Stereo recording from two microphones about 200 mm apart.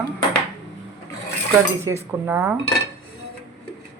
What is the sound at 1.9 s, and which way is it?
Speech, 15° right (ahead or behind).